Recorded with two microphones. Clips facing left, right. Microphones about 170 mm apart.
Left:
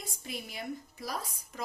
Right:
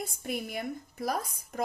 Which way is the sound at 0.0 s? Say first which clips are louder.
Right 7 dB; 55° right (ahead or behind).